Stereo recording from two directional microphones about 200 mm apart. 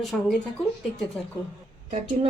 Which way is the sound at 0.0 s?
Centre (ahead or behind).